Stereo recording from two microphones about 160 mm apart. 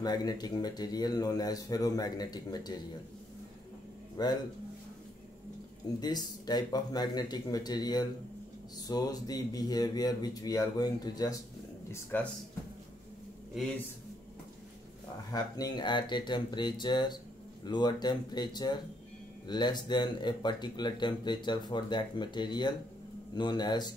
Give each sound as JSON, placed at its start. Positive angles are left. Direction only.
{"t": 0.0, "sound": "speech", "side_deg": 25}
{"t": 4.2, "sound": "speech", "side_deg": 25}
{"t": 5.9, "sound": "speech", "side_deg": 25}
{"t": 11.9, "sound": "speech", "side_deg": 10}
{"t": 15.3, "sound": "speech", "side_deg": 25}